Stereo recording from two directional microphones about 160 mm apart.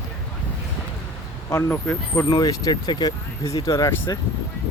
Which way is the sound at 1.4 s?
15° left (ahead or behind).